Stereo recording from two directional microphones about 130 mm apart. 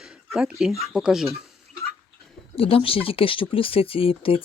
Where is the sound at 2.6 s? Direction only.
45° left (ahead or behind).